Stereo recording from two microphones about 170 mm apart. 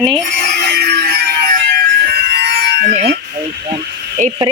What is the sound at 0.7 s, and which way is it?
Music, 70° right (ahead or behind).